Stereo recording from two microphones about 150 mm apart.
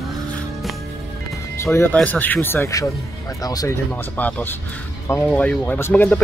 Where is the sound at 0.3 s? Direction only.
Centre (ahead or behind).